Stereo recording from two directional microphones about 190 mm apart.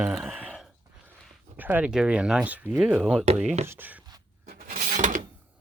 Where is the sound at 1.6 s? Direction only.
10° right (ahead or behind).